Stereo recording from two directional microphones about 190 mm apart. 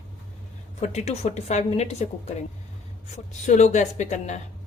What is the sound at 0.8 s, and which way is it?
A woman's voice, 35° left (ahead or behind).